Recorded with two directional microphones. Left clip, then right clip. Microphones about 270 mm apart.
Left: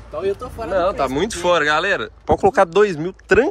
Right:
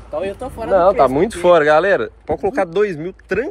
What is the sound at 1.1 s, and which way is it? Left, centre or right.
Speech, centre.